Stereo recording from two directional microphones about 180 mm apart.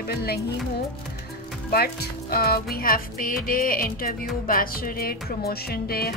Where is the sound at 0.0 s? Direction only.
60° left (ahead or behind).